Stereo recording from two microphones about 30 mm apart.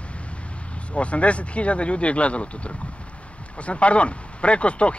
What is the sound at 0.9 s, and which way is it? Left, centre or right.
Speech, left.